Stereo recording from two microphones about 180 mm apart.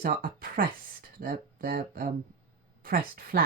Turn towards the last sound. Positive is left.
turn(degrees=-55)  # may be behind; listen again after turning